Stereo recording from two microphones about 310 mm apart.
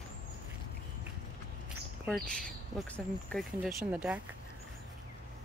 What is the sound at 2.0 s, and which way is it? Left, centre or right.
Speech, centre.